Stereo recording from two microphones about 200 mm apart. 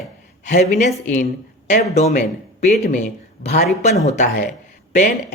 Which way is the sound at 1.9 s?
35° left (ahead or behind).